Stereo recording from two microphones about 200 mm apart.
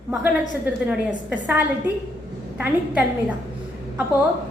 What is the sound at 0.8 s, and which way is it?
A woman's voice, 10° right (ahead or behind).